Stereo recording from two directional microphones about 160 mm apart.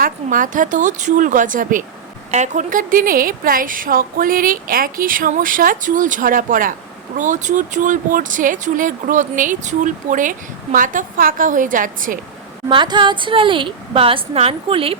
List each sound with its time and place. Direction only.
0.0 s speech: 55° right (ahead or behind)
12.6 s a woman's voice: 25° right (ahead or behind)